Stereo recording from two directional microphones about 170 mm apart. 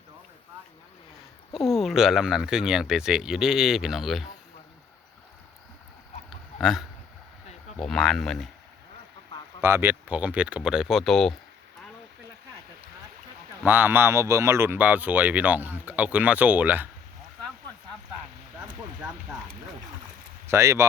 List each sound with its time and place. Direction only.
1.5 s speech: centre (ahead or behind)
6.6 s speech: centre (ahead or behind)
9.6 s speech: 15° right (ahead or behind); by 11.3 s 5° left (ahead or behind)
13.7 s speech: 10° right (ahead or behind)
20.5 s speech: 15° right (ahead or behind)